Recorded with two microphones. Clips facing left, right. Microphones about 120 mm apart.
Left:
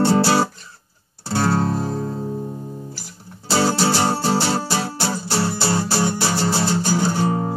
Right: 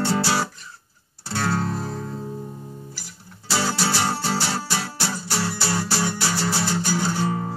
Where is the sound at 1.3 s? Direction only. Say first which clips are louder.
Left 5 dB; 30° left (ahead or behind).